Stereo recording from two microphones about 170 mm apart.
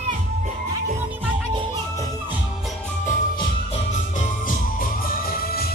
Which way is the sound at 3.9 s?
50° left (ahead or behind).